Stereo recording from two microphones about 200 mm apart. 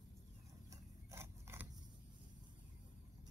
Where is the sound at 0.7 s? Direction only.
15° right (ahead or behind).